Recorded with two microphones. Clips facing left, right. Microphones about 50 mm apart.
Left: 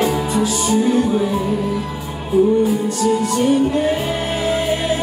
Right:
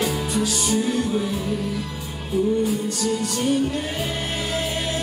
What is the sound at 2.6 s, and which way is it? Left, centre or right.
Music, centre.